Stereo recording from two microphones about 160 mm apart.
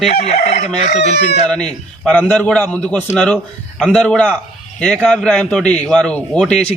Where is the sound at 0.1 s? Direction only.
40° left (ahead or behind).